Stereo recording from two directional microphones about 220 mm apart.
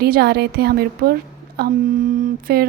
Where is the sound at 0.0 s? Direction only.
45° right (ahead or behind).